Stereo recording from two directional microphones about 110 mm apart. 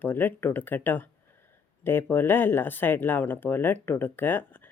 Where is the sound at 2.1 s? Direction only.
20° left (ahead or behind).